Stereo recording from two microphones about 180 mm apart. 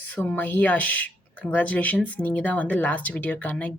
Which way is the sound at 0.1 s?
10° left (ahead or behind).